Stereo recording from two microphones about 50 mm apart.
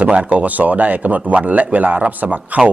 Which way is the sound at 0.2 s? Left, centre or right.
Right.